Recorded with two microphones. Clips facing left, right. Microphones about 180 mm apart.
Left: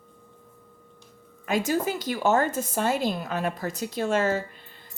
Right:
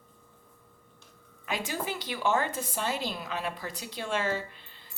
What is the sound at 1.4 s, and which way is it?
A woman's voice, 45° left (ahead or behind).